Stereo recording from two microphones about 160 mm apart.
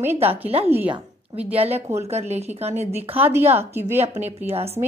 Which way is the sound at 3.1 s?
15° right (ahead or behind).